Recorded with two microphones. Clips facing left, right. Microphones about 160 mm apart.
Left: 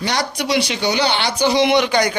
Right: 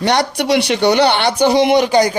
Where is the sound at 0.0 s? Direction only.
60° right (ahead or behind).